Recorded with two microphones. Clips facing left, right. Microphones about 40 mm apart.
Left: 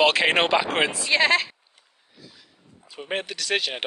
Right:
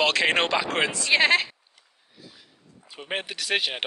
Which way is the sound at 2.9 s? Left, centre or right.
Centre.